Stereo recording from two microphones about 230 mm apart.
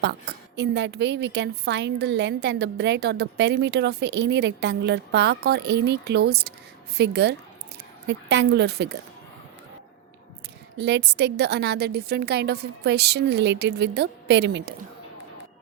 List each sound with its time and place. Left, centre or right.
0.0 s a woman's voice: right
10.8 s a woman's voice: right